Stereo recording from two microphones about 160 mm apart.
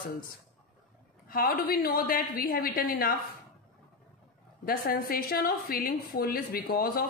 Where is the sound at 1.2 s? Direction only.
65° left (ahead or behind).